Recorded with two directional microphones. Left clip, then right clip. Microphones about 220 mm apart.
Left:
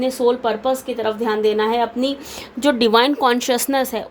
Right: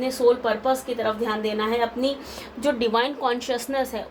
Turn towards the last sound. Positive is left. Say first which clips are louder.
# left 6 dB
turn(degrees=50)  # may be behind; listen again after turning